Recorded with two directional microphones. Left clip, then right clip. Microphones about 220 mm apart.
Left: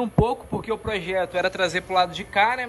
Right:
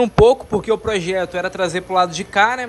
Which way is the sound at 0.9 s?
15° right (ahead or behind).